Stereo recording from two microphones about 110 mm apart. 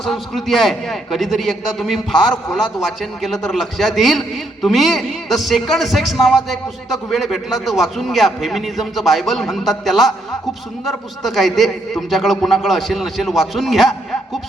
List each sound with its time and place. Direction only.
0.0 s a man's voice: centre (ahead or behind)